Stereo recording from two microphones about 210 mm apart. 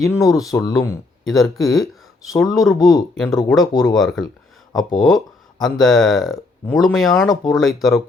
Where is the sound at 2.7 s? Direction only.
15° left (ahead or behind).